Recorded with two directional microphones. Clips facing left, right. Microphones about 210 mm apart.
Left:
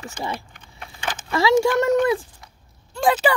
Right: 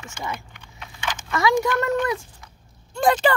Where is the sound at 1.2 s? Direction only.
25° left (ahead or behind).